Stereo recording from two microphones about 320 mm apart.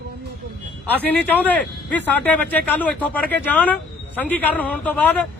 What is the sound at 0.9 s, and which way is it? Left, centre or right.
A man's voice, centre.